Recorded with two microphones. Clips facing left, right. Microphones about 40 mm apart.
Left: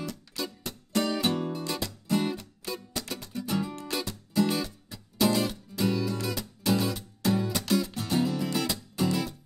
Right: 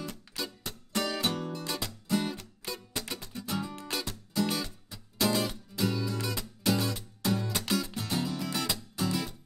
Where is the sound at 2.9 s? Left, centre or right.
Right.